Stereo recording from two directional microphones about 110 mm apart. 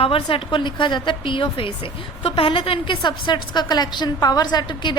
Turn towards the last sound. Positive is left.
turn(degrees=45)  # may be behind; listen again after turning